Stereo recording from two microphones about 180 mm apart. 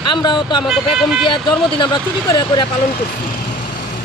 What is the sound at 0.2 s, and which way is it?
Speech, 25° left (ahead or behind).